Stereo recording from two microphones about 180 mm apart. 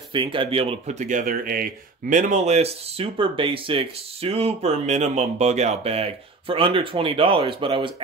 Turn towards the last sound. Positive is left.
turn(degrees=-30)  # may be behind; listen again after turning